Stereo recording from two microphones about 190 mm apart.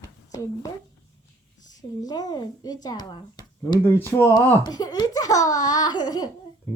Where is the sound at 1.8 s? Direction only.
20° left (ahead or behind).